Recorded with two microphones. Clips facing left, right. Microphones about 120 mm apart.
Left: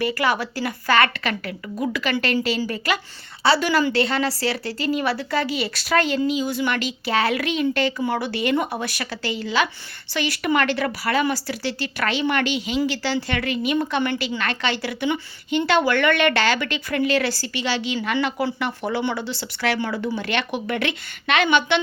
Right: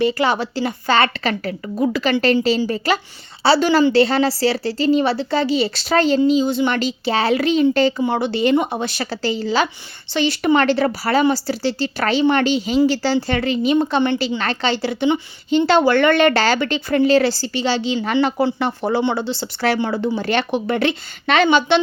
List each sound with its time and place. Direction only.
0.0 s a woman's voice: 25° right (ahead or behind)